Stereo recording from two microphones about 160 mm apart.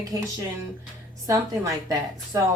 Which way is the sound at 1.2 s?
20° right (ahead or behind).